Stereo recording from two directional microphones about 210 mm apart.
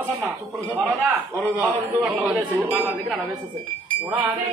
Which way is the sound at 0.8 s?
5° right (ahead or behind).